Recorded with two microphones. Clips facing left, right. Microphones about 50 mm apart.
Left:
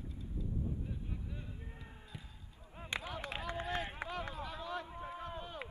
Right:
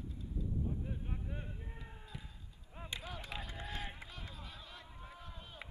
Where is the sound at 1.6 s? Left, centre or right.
Centre.